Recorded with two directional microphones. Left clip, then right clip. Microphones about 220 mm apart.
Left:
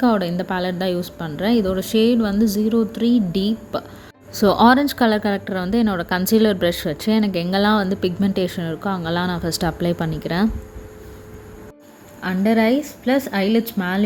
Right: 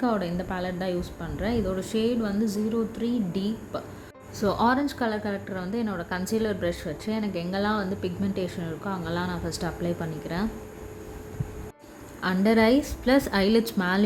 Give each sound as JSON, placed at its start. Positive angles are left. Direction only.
{"t": 0.0, "sound": "a woman's voice", "side_deg": 35}
{"t": 12.2, "sound": "a woman's voice", "side_deg": 5}